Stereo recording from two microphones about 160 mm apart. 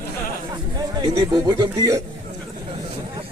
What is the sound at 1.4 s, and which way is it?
Speech, 25° right (ahead or behind).